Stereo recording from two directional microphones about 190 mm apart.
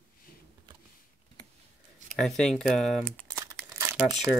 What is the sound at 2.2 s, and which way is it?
Speech, 5° left (ahead or behind).